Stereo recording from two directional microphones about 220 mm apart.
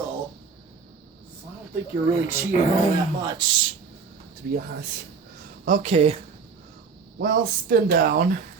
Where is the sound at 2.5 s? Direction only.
35° left (ahead or behind).